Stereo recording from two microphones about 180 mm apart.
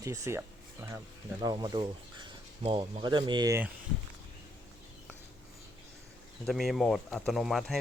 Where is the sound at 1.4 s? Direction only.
25° right (ahead or behind).